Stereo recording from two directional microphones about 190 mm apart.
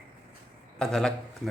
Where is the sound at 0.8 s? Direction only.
5° left (ahead or behind).